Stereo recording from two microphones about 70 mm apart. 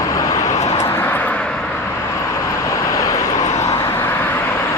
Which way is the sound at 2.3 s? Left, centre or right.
Left.